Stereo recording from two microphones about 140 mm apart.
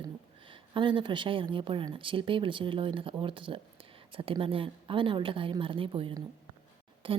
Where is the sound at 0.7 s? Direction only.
35° right (ahead or behind).